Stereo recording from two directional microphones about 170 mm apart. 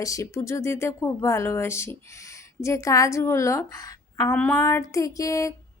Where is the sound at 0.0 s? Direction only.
20° left (ahead or behind).